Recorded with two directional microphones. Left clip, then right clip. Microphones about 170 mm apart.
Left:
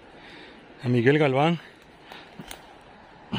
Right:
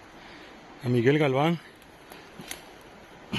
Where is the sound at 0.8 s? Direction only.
30° left (ahead or behind).